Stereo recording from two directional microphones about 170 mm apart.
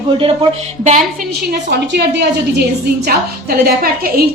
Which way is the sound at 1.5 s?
80° right.